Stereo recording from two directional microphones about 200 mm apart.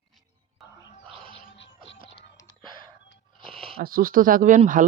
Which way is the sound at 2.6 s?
25° right (ahead or behind).